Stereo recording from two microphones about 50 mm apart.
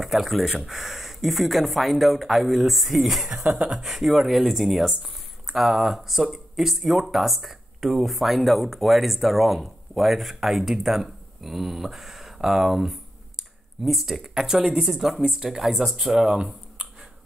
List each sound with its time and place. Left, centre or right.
0.0 s speech: centre
3.3 s speech: right
3.8 s speech: centre